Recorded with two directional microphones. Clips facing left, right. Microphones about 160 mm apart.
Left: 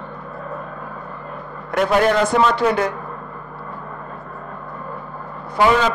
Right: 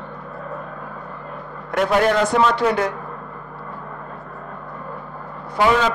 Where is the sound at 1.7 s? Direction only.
20° left (ahead or behind).